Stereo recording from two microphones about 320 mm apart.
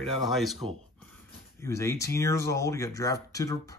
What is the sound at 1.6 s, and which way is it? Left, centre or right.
Speech, centre.